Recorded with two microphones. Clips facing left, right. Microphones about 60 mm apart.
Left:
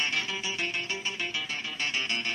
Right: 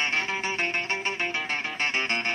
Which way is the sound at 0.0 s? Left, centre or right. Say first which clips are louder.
Right 4 dB; right.